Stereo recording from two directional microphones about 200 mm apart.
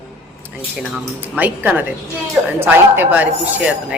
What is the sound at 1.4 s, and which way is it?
A woman's voice, 10° right (ahead or behind).